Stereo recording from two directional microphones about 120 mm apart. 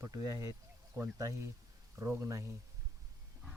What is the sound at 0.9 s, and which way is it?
Speech, 15° right (ahead or behind).